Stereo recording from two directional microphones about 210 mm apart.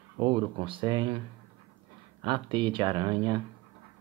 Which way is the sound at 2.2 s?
20° right (ahead or behind).